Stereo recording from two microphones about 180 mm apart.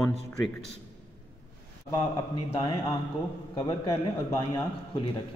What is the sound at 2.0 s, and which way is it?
A man's voice, 25° left (ahead or behind).